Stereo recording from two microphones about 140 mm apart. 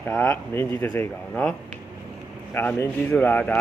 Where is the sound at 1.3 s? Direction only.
5° left (ahead or behind).